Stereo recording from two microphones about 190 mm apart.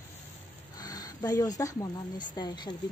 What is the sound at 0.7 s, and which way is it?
Speech, 20° left (ahead or behind).